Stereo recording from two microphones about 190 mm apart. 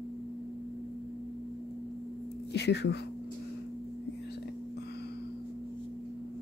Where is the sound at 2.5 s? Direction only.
65° left (ahead or behind).